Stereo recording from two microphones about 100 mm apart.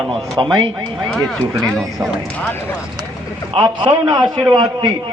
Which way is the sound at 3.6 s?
50° right (ahead or behind).